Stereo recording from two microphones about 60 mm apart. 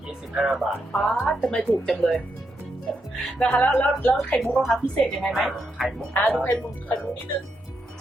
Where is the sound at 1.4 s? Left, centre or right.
Centre.